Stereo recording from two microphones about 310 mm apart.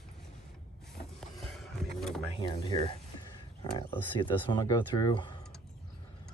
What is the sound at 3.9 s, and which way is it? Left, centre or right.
Speech, centre.